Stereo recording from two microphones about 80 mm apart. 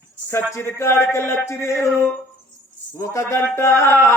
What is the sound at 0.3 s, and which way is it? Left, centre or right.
Speech, left.